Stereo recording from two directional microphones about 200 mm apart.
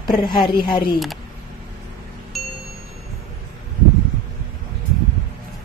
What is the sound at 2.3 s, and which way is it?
Music, centre (ahead or behind).